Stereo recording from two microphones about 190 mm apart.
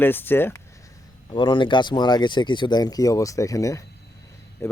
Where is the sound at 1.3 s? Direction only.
25° left (ahead or behind).